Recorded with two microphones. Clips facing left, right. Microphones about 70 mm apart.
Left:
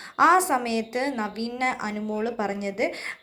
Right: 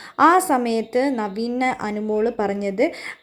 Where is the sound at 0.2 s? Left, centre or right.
Right.